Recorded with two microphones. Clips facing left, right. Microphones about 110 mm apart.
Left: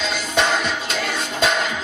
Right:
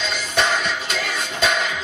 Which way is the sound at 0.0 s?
20° left (ahead or behind).